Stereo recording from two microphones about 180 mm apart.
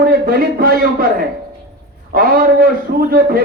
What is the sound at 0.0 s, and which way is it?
A man's voice, 55° right (ahead or behind).